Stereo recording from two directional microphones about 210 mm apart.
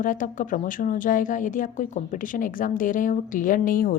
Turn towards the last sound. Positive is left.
turn(degrees=40)  # may be behind; listen again after turning